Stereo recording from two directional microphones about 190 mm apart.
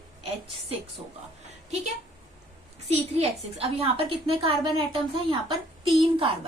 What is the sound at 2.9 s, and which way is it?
A woman's voice, 30° right (ahead or behind).